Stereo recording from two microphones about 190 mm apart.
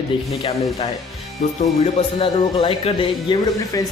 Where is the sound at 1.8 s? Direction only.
25° left (ahead or behind).